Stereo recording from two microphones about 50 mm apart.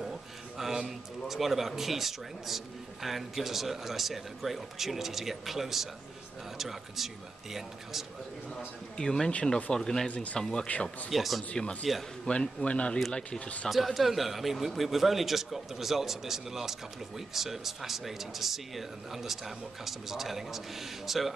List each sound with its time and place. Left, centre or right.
0.6 s speech: centre
8.5 s a man's voice: centre
9.3 s speech: left
9.8 s a man's voice: centre
10.1 s speech: left
10.4 s a man's voice: centre
10.7 s speech: left
11.1 s speech: centre
11.5 s speech: centre
13.7 s speech: centre